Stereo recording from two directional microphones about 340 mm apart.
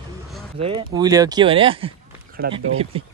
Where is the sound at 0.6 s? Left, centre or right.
Centre.